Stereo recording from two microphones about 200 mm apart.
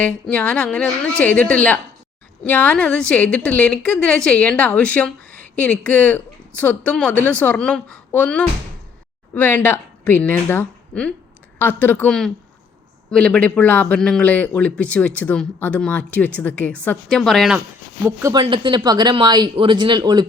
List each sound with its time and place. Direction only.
0.0 s a woman's voice: 5° left (ahead or behind)
18.0 s speech: 15° right (ahead or behind)